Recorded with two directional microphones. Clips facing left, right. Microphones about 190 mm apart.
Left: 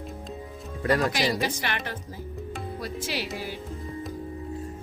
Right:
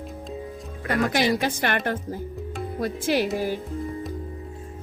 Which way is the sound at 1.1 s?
55° right (ahead or behind).